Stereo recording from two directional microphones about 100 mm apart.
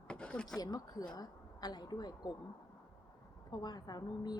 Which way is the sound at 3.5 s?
45° left (ahead or behind).